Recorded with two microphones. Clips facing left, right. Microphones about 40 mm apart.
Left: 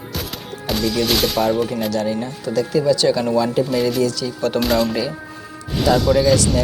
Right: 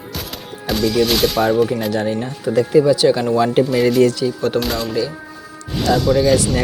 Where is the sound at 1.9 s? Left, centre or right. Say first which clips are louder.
Right 1 dB; right.